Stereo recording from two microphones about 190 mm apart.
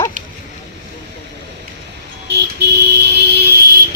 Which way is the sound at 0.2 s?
40° right (ahead or behind).